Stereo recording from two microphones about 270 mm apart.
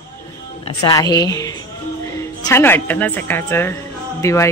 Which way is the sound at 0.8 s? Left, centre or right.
Centre.